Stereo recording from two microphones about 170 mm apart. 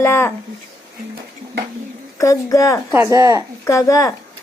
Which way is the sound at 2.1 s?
20° left (ahead or behind).